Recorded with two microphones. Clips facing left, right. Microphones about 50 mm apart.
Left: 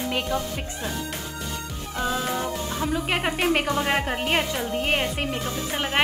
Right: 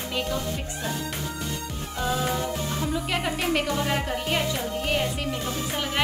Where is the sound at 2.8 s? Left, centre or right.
Left.